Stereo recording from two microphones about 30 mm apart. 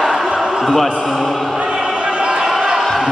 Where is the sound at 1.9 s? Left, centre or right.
Right.